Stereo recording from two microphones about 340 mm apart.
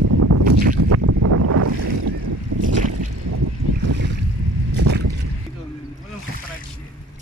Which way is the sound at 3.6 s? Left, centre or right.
Right.